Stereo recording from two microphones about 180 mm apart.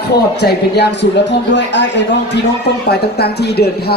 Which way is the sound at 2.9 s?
65° left (ahead or behind).